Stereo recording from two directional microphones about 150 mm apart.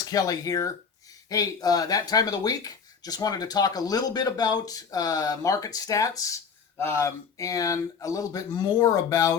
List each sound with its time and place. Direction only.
0.0 s speech: 25° left (ahead or behind)